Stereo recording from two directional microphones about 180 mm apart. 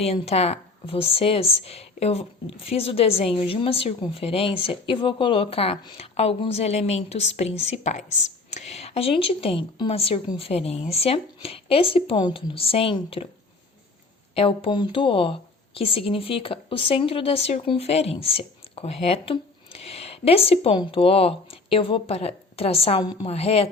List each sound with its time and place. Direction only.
0.0 s a woman's voice: 35° left (ahead or behind)
14.3 s a woman's voice: 30° left (ahead or behind)